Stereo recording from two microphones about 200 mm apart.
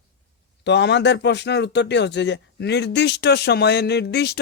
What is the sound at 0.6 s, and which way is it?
A man's voice, 60° left (ahead or behind).